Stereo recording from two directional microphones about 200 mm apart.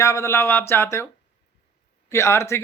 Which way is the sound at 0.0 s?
15° left (ahead or behind).